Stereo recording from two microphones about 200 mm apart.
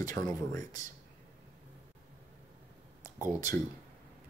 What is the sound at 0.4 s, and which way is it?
Speech, 15° left (ahead or behind).